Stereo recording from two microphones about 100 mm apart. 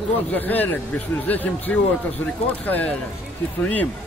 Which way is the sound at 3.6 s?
15° left (ahead or behind).